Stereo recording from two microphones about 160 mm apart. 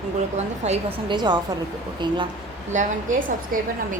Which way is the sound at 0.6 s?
45° right (ahead or behind).